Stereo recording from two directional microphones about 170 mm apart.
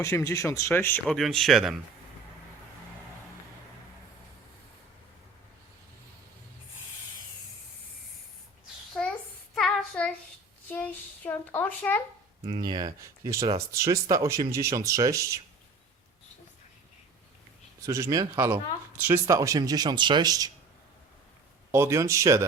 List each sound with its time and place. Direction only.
0.0 s speech: 15° left (ahead or behind)
1.0 s speech: centre (ahead or behind)
8.9 s a sound: 5° left (ahead or behind)
9.6 s child singing: 5° left (ahead or behind)
10.7 s a sound: 10° left (ahead or behind)
12.5 s speech: 25° right (ahead or behind)
17.8 s speech: 20° right (ahead or behind)
21.7 s speech: 15° right (ahead or behind)